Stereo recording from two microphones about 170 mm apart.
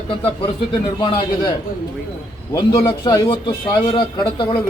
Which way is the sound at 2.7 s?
30° left (ahead or behind).